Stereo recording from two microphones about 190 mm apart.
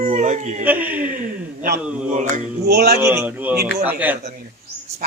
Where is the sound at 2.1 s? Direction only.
40° right (ahead or behind).